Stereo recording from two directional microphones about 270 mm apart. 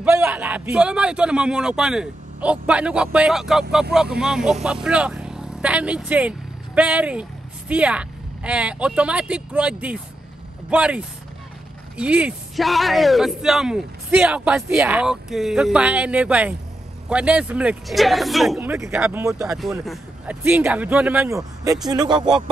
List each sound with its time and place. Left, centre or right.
0.0 s speech: centre